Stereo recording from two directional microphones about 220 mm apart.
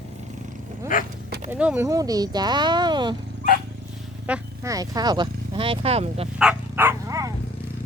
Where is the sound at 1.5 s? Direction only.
5° right (ahead or behind).